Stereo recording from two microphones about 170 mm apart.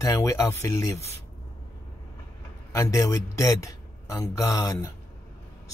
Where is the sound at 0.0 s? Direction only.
15° left (ahead or behind).